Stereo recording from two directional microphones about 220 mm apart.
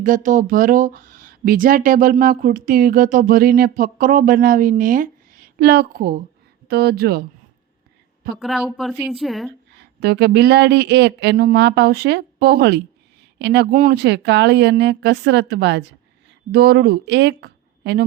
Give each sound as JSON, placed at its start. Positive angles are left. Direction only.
{"t": 0.0, "sound": "speech", "side_deg": -35}
{"t": 8.4, "sound": "speech", "side_deg": 0}
{"t": 9.7, "sound": "speech", "side_deg": -45}